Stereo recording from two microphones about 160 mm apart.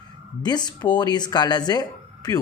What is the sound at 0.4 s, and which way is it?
Speech, 25° left (ahead or behind).